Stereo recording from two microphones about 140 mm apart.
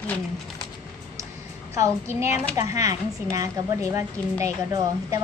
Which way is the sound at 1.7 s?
20° right (ahead or behind).